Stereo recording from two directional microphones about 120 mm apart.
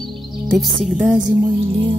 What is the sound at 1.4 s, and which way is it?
Music, 45° right (ahead or behind).